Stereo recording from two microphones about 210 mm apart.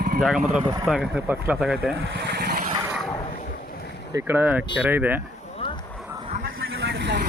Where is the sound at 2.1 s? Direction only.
50° right (ahead or behind).